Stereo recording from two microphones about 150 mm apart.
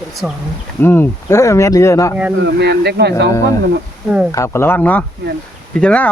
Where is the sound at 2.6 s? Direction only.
90° right.